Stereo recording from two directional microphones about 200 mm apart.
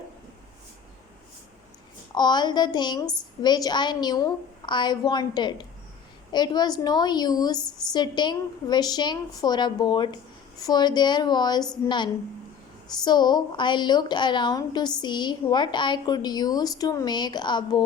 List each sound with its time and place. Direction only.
2.1 s a woman's voice: 20° left (ahead or behind)